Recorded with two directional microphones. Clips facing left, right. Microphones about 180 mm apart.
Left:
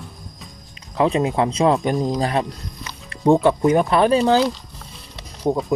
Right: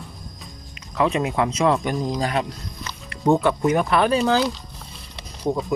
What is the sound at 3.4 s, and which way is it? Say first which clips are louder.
Speech: left 4 dB; 30° left (ahead or behind).